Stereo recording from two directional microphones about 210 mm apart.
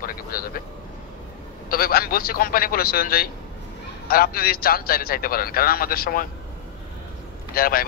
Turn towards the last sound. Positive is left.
turn(degrees=45)  # may be behind; listen again after turning